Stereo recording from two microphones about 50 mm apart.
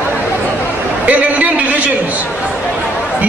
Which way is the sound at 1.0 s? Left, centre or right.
Right.